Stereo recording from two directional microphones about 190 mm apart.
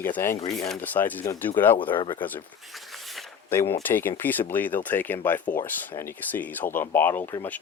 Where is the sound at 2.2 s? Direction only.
10° left (ahead or behind).